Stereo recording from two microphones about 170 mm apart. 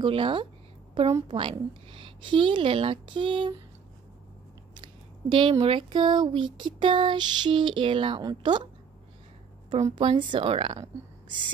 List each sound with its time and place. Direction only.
0.0 s speech: 30° right (ahead or behind)
4.8 s speech: 30° right (ahead or behind)
9.9 s speech: 30° right (ahead or behind)